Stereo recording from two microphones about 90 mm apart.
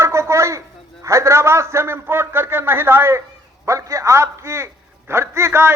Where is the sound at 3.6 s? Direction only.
35° right (ahead or behind).